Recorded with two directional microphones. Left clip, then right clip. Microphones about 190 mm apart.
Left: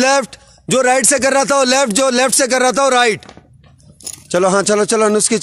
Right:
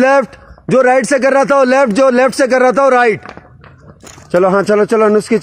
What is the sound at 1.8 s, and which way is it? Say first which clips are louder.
Speech: right 4 dB; 25° left (ahead or behind).